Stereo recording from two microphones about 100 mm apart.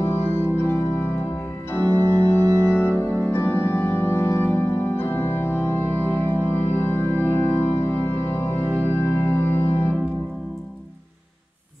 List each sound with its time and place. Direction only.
0.0 s organ: 25° left (ahead or behind)